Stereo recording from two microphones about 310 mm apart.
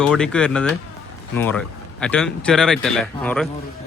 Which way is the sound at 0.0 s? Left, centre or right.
Centre.